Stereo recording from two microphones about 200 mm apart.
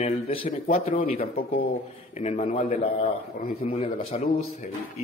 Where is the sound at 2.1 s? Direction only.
35° left (ahead or behind).